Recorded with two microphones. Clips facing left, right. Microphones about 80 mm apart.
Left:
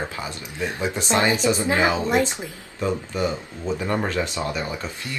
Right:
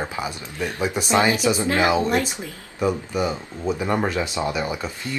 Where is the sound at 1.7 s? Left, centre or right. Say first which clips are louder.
Right 3 dB; left.